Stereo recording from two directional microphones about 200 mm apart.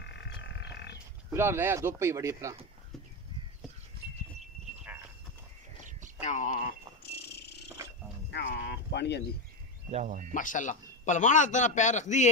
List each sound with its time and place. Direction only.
0.4 s a sound: 60° left (ahead or behind)
1.3 s speech: 10° right (ahead or behind)
6.2 s a man's voice: 40° left (ahead or behind)
7.0 s a sound: 55° left (ahead or behind)
9.8 s speech: 35° right (ahead or behind)
10.3 s a man's voice: 40° left (ahead or behind)